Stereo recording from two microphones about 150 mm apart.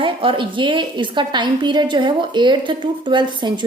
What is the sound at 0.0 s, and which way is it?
A woman's voice, 35° right (ahead or behind).